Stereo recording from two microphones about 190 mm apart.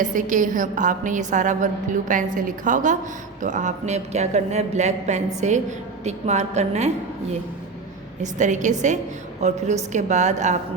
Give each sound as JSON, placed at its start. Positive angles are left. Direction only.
{"t": 0.0, "sound": "a woman's voice", "side_deg": -45}
{"t": 8.2, "sound": "speech", "side_deg": -40}